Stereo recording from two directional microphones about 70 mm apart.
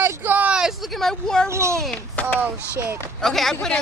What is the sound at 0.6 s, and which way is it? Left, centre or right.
Speech, centre.